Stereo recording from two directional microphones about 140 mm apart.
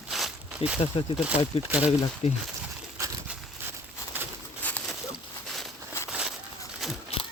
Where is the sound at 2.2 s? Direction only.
45° left (ahead or behind).